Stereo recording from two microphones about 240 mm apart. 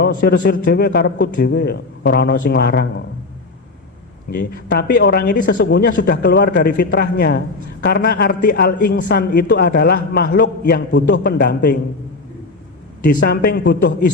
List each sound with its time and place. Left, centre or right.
0.0 s speech: left
4.5 s speech: left
13.0 s speech: left